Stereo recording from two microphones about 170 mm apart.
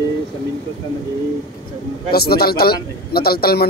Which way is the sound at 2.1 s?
65° left (ahead or behind).